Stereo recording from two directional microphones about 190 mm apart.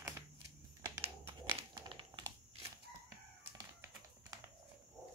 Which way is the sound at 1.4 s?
25° right (ahead or behind).